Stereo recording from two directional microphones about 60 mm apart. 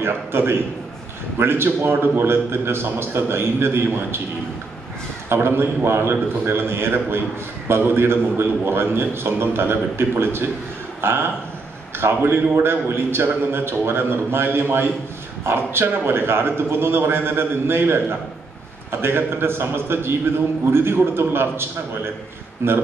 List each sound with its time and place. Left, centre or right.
0.0 s a man's voice: right
5.3 s a man's voice: right